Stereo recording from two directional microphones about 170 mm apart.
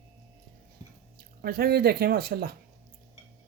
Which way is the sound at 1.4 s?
65° right (ahead or behind).